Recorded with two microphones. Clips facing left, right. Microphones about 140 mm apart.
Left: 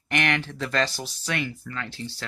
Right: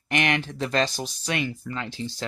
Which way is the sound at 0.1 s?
20° right (ahead or behind).